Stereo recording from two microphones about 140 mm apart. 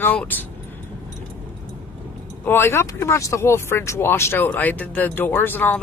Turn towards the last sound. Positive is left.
turn(degrees=15)  # may be behind; listen again after turning